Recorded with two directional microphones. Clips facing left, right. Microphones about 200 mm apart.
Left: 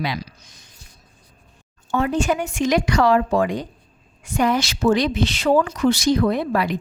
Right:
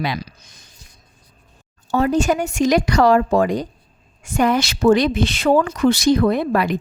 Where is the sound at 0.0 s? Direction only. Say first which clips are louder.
Right 2 dB; 50° right (ahead or behind).